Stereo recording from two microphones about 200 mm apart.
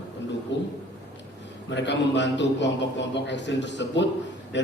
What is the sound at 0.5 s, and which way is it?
A man's voice, 60° left (ahead or behind).